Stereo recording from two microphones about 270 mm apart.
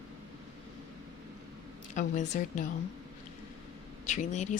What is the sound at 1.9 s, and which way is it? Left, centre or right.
Speech, left.